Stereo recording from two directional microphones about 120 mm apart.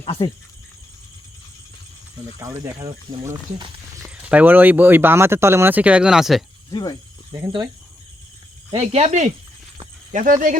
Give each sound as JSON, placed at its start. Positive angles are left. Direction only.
{"t": 0.0, "sound": "speech", "side_deg": 55}
{"t": 2.4, "sound": "speech", "side_deg": -25}
{"t": 4.0, "sound": "speech", "side_deg": -10}
{"t": 6.7, "sound": "speech", "side_deg": 35}
{"t": 8.7, "sound": "speech", "side_deg": -60}